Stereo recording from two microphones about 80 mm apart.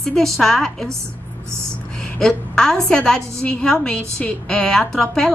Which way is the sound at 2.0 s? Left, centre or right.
Centre.